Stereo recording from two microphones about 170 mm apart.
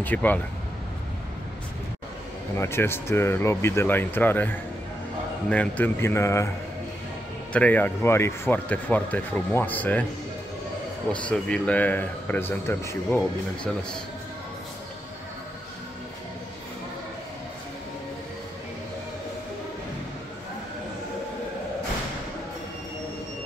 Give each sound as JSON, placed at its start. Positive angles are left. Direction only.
{"t": 0.0, "sound": "speech", "side_deg": 10}
{"t": 2.6, "sound": "speech", "side_deg": 15}
{"t": 7.5, "sound": "speech", "side_deg": 10}
{"t": 11.1, "sound": "speech", "side_deg": 5}